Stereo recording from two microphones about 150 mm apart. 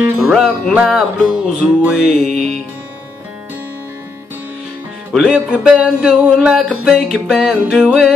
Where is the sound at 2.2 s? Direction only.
50° right (ahead or behind).